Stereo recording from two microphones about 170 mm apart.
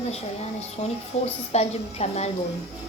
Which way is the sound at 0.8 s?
40° left (ahead or behind).